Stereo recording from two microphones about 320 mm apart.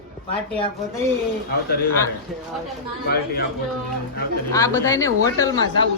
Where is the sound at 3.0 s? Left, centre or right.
Left.